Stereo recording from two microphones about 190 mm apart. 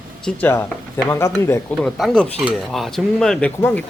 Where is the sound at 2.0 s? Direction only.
5° left (ahead or behind).